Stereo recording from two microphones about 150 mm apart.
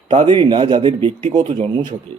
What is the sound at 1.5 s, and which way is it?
Speech, 50° right (ahead or behind).